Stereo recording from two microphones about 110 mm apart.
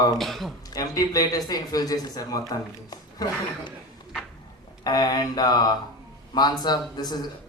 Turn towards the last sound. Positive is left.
turn(degrees=40)  # may be behind; listen again after turning